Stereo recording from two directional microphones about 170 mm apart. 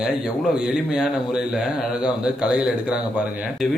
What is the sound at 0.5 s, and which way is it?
A man's voice, 5° right (ahead or behind).